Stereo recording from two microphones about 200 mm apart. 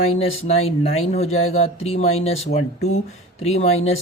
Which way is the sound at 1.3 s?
90° left.